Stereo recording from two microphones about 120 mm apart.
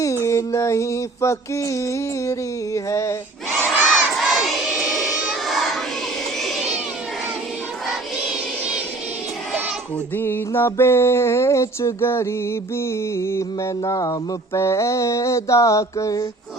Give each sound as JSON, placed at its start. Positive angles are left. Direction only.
{"t": 0.0, "sound": "mantra", "side_deg": 25}
{"t": 3.7, "sound": "crowd", "side_deg": 0}
{"t": 10.2, "sound": "mantra", "side_deg": 20}